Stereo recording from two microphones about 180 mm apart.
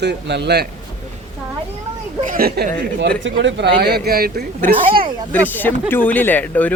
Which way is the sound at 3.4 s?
75° right (ahead or behind).